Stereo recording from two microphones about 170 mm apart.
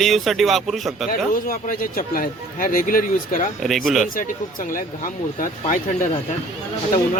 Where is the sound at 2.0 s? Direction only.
55° left (ahead or behind).